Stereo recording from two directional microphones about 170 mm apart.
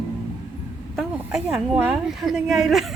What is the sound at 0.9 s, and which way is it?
A woman's voice, 5° right (ahead or behind).